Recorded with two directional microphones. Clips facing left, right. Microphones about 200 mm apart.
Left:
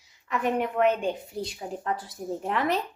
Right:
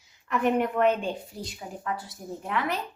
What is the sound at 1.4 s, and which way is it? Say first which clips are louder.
A woman's voice: left 4 dB; 30° left (ahead or behind).